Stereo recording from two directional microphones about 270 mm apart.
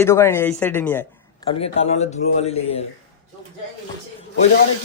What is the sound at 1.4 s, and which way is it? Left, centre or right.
A man's voice, centre.